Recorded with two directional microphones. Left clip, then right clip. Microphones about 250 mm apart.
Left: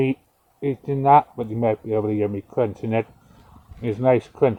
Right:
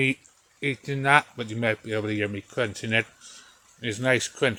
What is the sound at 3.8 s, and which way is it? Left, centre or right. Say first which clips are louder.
Speech: left 5 dB; right.